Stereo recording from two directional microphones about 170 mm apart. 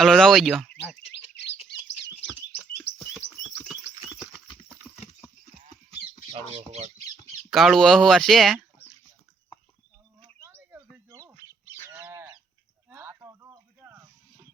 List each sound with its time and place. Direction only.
0.0 s speech: centre (ahead or behind)
1.4 s bird: 90° left
6.3 s speech: 35° right (ahead or behind)
7.5 s speech: centre (ahead or behind)
10.4 s bird: 10° right (ahead or behind)
11.2 s goose: 15° right (ahead or behind)
12.9 s a sound: 15° right (ahead or behind)